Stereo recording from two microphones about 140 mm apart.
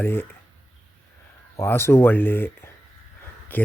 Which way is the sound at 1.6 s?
20° left (ahead or behind).